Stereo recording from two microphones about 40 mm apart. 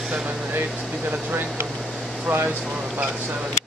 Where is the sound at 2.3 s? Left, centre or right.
Right.